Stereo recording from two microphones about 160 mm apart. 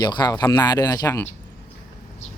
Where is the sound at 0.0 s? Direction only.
25° left (ahead or behind).